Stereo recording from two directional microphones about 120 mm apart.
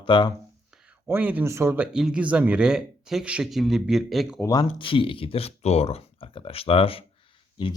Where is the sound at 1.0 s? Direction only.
15° right (ahead or behind).